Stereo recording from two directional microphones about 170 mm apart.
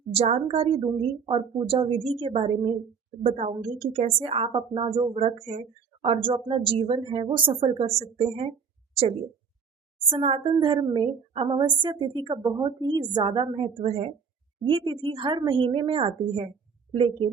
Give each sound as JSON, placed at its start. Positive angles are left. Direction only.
{"t": 0.1, "sound": "a woman's voice", "side_deg": -35}
{"t": 10.1, "sound": "a woman's voice", "side_deg": -30}